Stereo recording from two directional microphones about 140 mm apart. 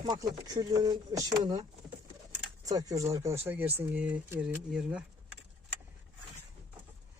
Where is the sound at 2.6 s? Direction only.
25° right (ahead or behind); by 5.0 s 5° right (ahead or behind).